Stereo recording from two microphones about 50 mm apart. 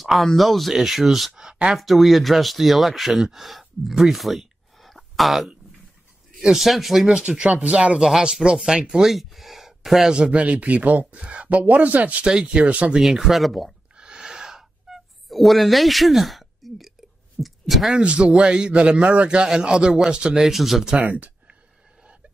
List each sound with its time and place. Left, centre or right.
0.0 s speech: centre
1.8 s speech: centre
7.2 s a man's voice: centre
7.4 s speech: right
8.0 s a man's voice: centre
9.1 s speech: centre
10.1 s speech: right
12.3 s a man's voice: centre
12.6 s speech: right
12.9 s speech: centre
13.9 s a sound: centre
17.4 s speech: centre
17.9 s a man's voice: right; by 20.9 s centre
20.9 s speech: right